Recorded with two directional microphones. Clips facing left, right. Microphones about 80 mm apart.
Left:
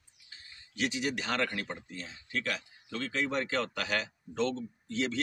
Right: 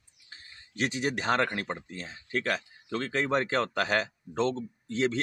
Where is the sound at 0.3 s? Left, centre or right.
Right.